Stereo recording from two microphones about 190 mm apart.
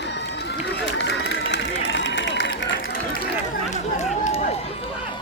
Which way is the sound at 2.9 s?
50° left (ahead or behind).